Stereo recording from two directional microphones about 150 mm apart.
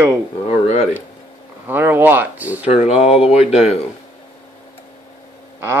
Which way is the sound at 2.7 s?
40° left (ahead or behind).